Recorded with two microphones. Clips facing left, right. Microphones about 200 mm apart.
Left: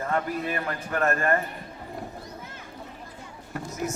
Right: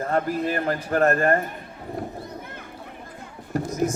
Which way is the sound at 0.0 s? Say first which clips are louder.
Right 4 dB; 35° right (ahead or behind).